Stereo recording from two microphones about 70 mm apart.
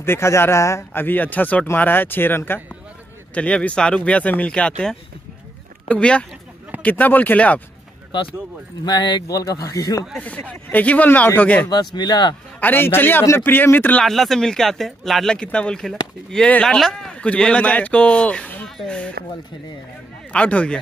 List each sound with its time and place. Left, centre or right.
0.0 s speech: left
1.0 s speech: left
3.3 s speech: centre
8.8 s speech: left
9.4 s speech: left
10.1 s speech: left
11.7 s speech: left
12.5 s speech: left
14.0 s speech: centre
20.3 s speech: centre